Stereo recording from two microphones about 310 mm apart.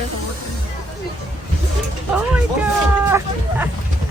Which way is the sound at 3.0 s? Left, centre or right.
Centre.